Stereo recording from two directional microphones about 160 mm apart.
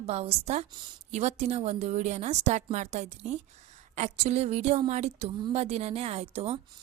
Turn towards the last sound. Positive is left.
turn(degrees=-40)  # may be behind; listen again after turning